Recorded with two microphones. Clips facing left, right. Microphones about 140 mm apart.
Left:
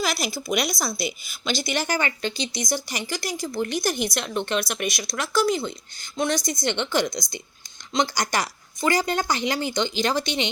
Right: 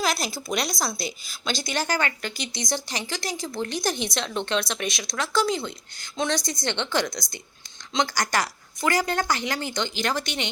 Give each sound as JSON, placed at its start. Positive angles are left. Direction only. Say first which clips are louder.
{"t": 0.0, "sound": "a sound", "louder": "even", "side_deg": 5}
{"t": 0.4, "sound": "a woman's voice", "louder": "left 2 dB", "side_deg": 10}
{"t": 2.6, "sound": "a woman's voice", "louder": "left 2 dB", "side_deg": 5}